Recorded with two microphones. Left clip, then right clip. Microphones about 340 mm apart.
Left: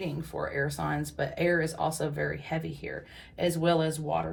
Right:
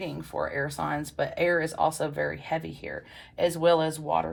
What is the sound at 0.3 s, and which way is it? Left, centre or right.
Speech, centre.